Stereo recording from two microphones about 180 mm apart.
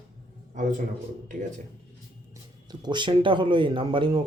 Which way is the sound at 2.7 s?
25° right (ahead or behind).